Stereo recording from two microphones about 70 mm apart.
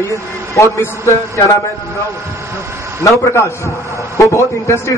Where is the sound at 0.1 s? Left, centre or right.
Left.